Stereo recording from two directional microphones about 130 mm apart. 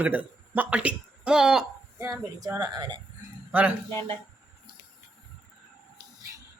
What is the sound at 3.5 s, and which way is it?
Speech, 10° right (ahead or behind).